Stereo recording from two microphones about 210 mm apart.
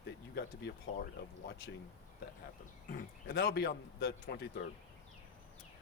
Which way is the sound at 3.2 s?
50° left (ahead or behind).